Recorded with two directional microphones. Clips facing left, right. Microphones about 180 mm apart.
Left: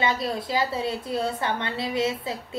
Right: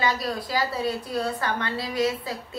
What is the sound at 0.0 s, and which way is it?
A woman's voice, 25° left (ahead or behind).